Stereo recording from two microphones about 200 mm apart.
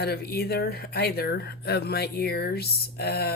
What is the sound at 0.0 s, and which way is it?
Speech, 55° left (ahead or behind).